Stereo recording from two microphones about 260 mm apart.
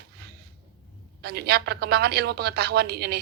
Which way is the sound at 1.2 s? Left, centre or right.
Right.